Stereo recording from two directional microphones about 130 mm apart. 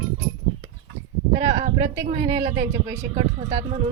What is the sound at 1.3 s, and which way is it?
Speech, 55° right (ahead or behind).